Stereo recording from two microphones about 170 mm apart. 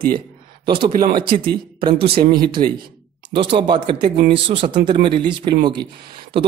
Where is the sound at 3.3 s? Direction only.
30° right (ahead or behind).